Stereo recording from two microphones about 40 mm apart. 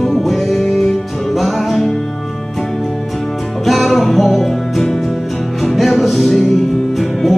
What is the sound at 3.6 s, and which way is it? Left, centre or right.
Music, centre.